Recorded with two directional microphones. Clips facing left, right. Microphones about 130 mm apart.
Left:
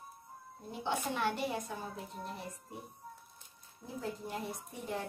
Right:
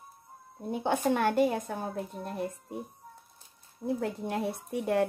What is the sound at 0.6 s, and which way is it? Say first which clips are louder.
A woman's voice: right 9 dB; 55° right (ahead or behind).